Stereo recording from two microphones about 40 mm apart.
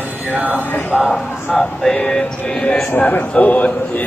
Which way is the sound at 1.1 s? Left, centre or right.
Centre.